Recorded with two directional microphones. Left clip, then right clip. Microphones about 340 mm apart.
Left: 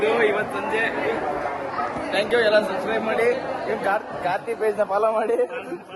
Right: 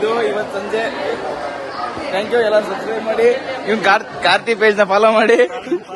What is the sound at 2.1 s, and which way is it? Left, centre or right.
Speech, centre.